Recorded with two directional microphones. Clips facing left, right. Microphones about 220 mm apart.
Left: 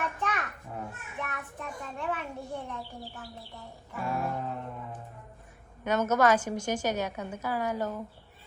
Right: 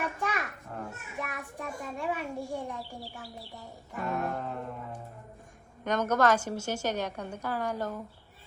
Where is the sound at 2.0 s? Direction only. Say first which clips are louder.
Right 1 dB; 10° right (ahead or behind).